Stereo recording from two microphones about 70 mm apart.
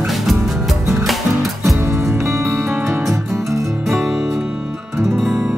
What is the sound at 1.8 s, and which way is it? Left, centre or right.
Music, right.